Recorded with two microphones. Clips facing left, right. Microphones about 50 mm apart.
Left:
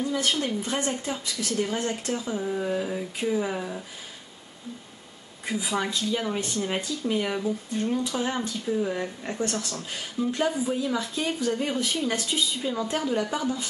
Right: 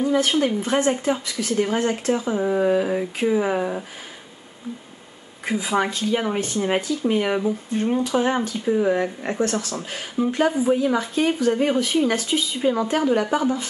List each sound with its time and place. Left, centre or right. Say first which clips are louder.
0.0 s speech: right 7 dB; right
5.4 s speech: right 6 dB; right
10.8 s speech: right 7 dB; right